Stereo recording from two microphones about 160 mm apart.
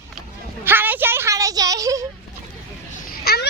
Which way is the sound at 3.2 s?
90° left.